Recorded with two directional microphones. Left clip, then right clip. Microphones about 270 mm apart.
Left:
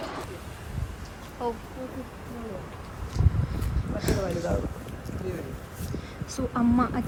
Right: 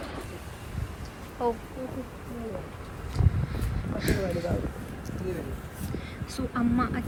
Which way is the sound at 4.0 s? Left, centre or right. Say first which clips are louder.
Left 1 dB; centre.